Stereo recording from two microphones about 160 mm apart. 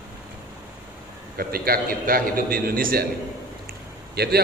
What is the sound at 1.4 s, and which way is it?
A man's voice, 70° right (ahead or behind).